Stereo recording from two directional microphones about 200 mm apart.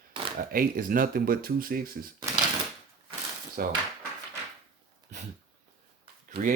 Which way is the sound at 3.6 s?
45° right (ahead or behind).